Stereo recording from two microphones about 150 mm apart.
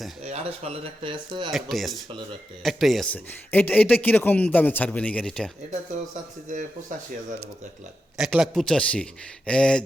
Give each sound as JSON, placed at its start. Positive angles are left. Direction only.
{"t": 0.2, "sound": "speech", "side_deg": -45}
{"t": 1.5, "sound": "speech", "side_deg": 0}
{"t": 8.2, "sound": "speech", "side_deg": -5}